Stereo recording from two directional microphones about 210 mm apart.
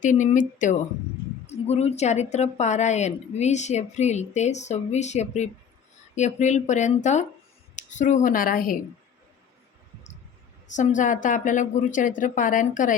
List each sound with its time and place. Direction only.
0.0 s a woman's voice: 35° left (ahead or behind)
10.7 s a woman's voice: 35° left (ahead or behind)